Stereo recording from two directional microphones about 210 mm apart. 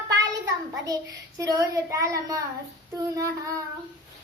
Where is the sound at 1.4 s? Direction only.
15° right (ahead or behind).